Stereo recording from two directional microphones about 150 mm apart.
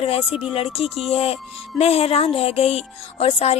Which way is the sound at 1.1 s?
40° left (ahead or behind).